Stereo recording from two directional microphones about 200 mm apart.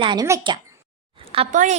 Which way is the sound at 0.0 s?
20° right (ahead or behind).